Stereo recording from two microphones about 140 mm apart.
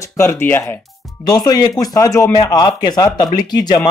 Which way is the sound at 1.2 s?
30° left (ahead or behind).